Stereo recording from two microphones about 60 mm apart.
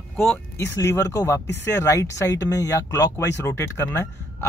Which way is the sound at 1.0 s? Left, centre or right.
Left.